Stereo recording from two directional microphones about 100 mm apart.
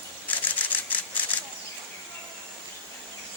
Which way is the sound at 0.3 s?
15° left (ahead or behind).